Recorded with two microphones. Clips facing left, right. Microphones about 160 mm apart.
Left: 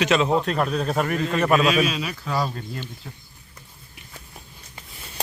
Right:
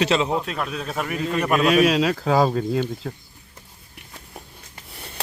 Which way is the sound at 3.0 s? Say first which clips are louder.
Right 9 dB; 70° right (ahead or behind).